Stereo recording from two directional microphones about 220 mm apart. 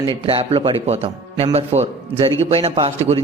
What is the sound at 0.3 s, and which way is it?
A man's voice, 25° right (ahead or behind).